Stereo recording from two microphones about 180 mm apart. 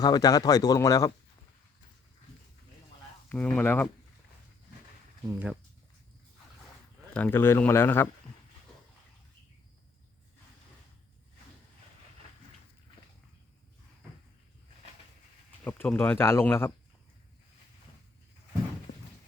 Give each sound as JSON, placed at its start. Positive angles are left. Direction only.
{"t": 0.0, "sound": "speech", "side_deg": 20}
{"t": 3.2, "sound": "speech", "side_deg": 5}
{"t": 5.3, "sound": "speech", "side_deg": -10}
{"t": 7.1, "sound": "speech", "side_deg": 10}
{"t": 15.6, "sound": "speech", "side_deg": 10}